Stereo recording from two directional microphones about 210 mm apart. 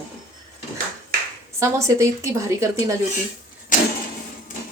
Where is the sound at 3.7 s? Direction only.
40° left (ahead or behind).